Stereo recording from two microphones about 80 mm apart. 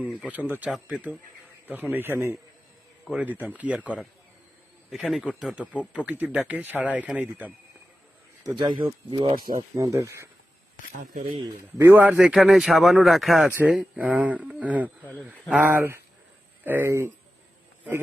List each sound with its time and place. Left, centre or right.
0.3 s a man's voice: right; by 5.5 s centre
6.0 s speech: centre
8.5 s speech: right
9.6 s speech: right
11.8 s speech: right
12.0 s speech: centre
13.5 s speech: right